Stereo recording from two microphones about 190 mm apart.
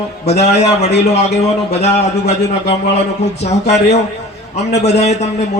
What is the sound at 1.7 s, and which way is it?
A man's voice, 35° left (ahead or behind).